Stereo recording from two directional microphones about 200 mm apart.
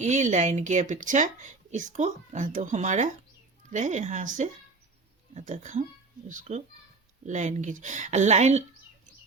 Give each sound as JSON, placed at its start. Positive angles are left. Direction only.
{"t": 0.0, "sound": "speech", "side_deg": -35}